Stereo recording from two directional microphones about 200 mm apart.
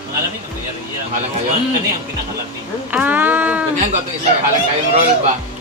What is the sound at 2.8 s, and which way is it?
Speech, 10° right (ahead or behind).